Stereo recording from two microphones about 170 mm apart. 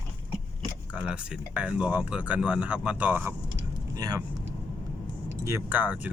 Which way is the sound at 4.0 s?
20° right (ahead or behind).